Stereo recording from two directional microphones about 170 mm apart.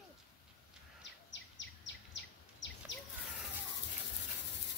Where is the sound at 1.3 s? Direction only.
90° left.